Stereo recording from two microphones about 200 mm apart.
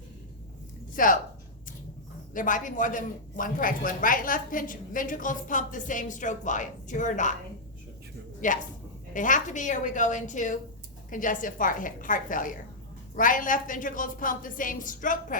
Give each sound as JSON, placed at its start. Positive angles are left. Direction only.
{"t": 0.9, "sound": "speech", "side_deg": 45}
{"t": 2.3, "sound": "speech", "side_deg": 40}
{"t": 8.4, "sound": "speech", "side_deg": 40}